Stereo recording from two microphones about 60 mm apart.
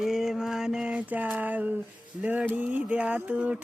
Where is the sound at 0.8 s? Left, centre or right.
Right.